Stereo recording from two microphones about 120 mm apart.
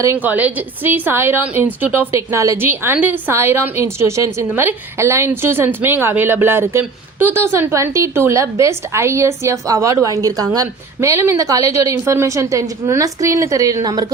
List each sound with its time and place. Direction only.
0.2 s a woman's voice: 15° right (ahead or behind); by 14.0 s 30° right (ahead or behind)